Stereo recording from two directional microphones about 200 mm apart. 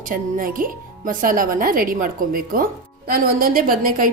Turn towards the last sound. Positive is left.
turn(degrees=-45)  # may be behind; listen again after turning